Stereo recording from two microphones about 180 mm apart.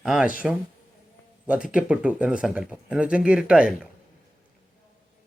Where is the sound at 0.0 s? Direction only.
5° right (ahead or behind).